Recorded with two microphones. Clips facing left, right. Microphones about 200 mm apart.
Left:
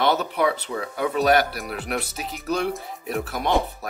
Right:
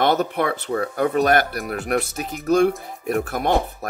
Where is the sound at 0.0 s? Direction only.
50° right (ahead or behind).